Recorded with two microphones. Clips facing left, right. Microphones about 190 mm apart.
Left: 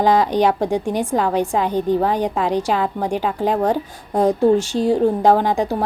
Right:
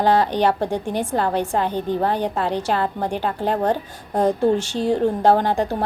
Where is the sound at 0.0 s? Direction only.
10° left (ahead or behind).